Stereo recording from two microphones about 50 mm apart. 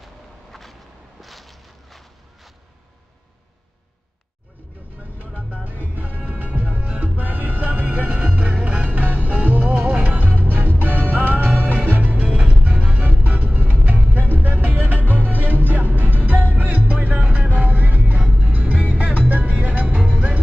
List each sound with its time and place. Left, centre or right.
0.0 s a sound: centre
1.2 s walk: centre
5.9 s music: right